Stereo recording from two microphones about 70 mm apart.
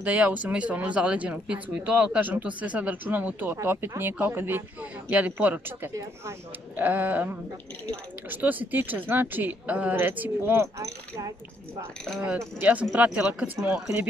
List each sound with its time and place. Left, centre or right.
0.0 s speech: right
10.8 s speech: right
12.9 s speech: right